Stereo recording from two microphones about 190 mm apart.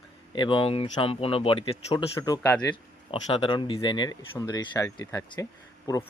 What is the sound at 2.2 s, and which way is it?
Speech, 15° left (ahead or behind).